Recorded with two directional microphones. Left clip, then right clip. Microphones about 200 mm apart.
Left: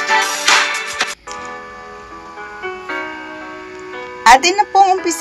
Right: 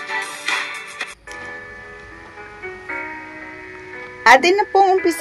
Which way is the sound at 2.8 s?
35° left (ahead or behind).